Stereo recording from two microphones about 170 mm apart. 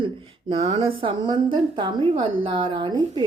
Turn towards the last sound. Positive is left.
turn(degrees=-30)  # may be behind; listen again after turning